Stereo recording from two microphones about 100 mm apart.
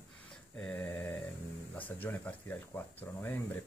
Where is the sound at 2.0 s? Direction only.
15° left (ahead or behind).